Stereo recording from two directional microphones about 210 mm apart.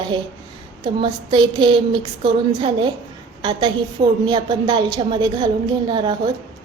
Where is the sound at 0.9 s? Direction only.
20° right (ahead or behind).